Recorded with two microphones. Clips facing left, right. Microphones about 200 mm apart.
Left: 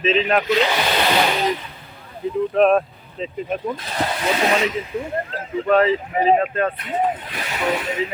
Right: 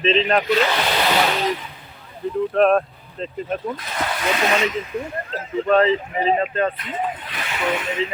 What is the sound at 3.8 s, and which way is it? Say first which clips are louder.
Speech: left 2 dB; 30° left (ahead or behind).